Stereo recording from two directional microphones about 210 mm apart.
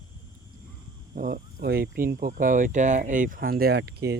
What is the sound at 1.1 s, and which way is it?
Speech, 40° right (ahead or behind).